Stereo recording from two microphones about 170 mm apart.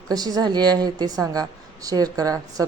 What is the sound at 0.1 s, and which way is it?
Speech, 20° right (ahead or behind).